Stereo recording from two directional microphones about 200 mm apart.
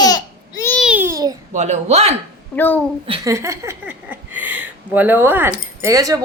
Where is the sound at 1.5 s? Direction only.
35° right (ahead or behind).